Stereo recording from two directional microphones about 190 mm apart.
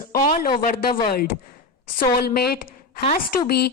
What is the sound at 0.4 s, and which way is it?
Speech, 50° left (ahead or behind).